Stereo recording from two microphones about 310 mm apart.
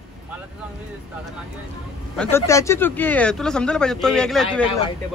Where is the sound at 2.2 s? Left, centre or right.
Centre.